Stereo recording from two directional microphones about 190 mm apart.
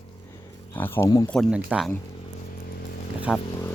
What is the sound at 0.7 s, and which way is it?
Speech, 10° left (ahead or behind).